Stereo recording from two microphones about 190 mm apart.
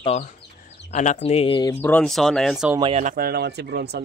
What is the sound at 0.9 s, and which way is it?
Speech, 40° left (ahead or behind).